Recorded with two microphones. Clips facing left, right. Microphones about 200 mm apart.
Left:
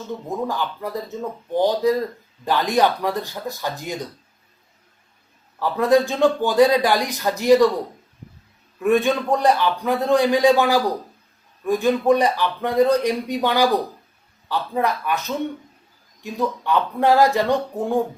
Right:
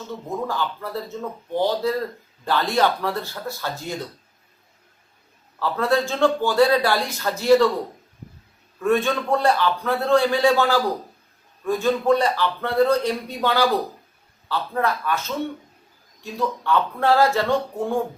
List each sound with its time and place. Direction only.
0.4 s a man's voice: 15° left (ahead or behind)
5.5 s a man's voice: 15° left (ahead or behind)
8.8 s a man's voice: 15° left (ahead or behind)